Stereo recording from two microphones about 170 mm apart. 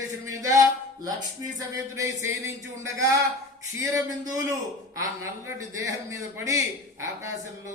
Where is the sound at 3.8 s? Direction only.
20° right (ahead or behind).